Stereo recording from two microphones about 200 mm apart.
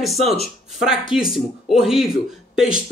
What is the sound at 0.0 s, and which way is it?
A man's voice, centre (ahead or behind).